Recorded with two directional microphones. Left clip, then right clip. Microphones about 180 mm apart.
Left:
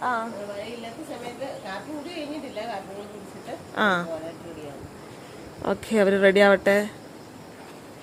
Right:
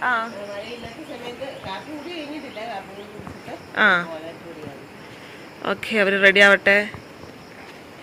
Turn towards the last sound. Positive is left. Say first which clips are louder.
# right 4 dB
turn(degrees=25)  # may be behind; listen again after turning